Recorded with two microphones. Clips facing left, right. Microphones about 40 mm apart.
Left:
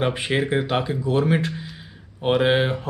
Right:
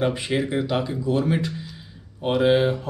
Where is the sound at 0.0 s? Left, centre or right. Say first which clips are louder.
Left 1 dB; left.